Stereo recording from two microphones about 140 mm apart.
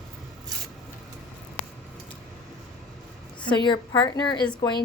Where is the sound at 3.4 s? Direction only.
35° left (ahead or behind).